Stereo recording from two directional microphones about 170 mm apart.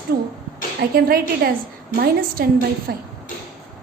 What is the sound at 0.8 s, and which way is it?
A woman's voice, 60° right (ahead or behind).